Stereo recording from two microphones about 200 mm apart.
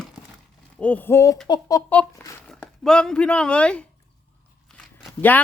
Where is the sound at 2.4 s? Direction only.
5° left (ahead or behind).